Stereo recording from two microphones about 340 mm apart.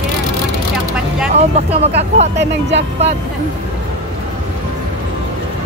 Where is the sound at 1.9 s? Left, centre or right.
Right.